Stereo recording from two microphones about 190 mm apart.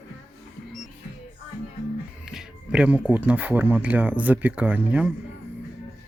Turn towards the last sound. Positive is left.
turn(degrees=-5)  # may be behind; listen again after turning